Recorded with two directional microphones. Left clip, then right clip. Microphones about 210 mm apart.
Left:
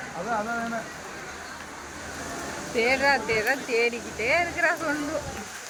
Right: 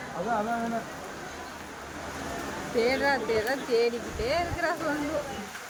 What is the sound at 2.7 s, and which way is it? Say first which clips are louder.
Speech: left 3 dB; 5° left (ahead or behind).